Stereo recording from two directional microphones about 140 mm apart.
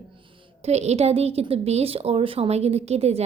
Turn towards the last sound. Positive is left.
turn(degrees=-50)  # may be behind; listen again after turning